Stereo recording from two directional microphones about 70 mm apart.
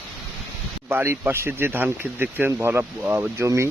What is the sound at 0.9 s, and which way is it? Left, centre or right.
Speech, right.